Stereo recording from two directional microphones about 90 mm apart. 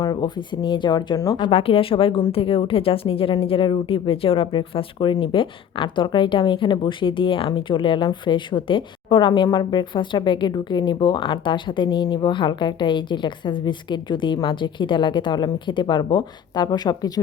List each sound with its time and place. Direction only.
0.0 s speech: 55° left (ahead or behind)
1.4 s a woman's voice: 85° left
5.2 s speech: 75° left (ahead or behind); by 17.1 s 50° left (ahead or behind)